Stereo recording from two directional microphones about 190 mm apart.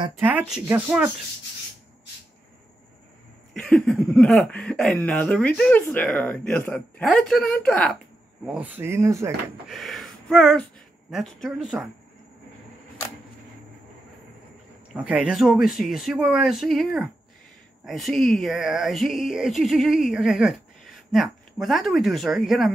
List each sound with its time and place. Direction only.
0.2 s speech: 10° right (ahead or behind)
3.5 s speech: 5° left (ahead or behind)
8.5 s speech: 10° right (ahead or behind)
9.7 s speech: centre (ahead or behind)
15.0 s speech: 5° right (ahead or behind)